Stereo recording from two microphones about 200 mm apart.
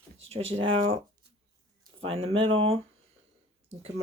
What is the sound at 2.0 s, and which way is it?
Speech, 30° right (ahead or behind).